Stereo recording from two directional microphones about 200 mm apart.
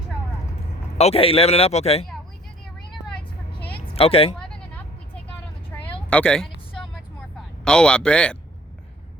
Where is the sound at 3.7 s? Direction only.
30° left (ahead or behind).